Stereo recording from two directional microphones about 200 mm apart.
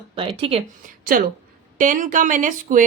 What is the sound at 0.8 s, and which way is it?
A woman's voice, 45° right (ahead or behind).